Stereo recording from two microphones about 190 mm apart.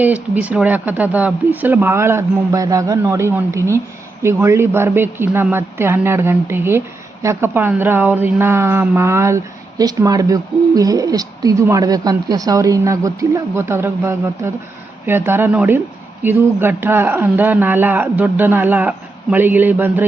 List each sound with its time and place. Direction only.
0.0 s a woman's voice: 10° right (ahead or behind)